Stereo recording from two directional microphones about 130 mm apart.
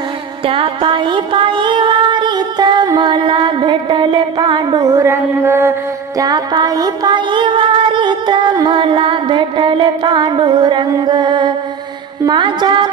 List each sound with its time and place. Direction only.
0.5 s music: 40° right (ahead or behind)